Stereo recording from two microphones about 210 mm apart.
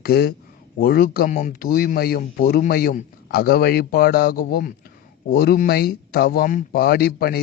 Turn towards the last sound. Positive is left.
turn(degrees=50)  # may be behind; listen again after turning